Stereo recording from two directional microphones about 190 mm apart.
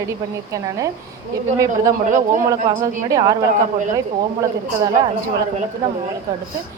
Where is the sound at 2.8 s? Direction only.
20° right (ahead or behind).